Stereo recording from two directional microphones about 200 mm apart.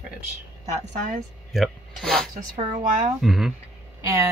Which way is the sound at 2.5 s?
40° right (ahead or behind).